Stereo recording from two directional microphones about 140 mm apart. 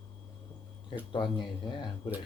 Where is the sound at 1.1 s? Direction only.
35° left (ahead or behind).